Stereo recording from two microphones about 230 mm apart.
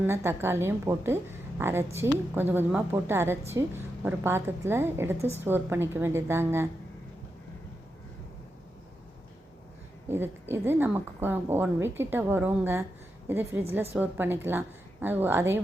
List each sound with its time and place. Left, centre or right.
0.0 s a woman's voice: centre
10.1 s a woman's voice: centre